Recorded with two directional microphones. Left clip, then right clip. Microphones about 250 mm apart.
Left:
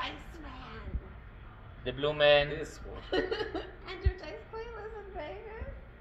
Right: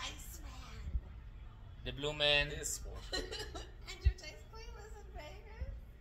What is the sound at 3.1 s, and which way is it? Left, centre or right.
Speech, right.